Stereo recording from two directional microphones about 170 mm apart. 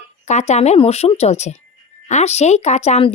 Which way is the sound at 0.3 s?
40° left (ahead or behind).